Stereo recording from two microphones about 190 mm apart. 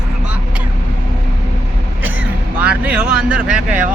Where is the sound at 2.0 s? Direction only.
90° right.